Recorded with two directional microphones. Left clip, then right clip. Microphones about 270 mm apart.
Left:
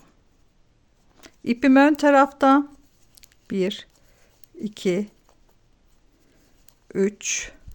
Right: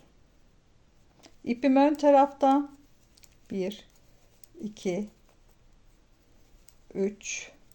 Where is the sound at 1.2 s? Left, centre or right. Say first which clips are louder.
Left 6 dB; left.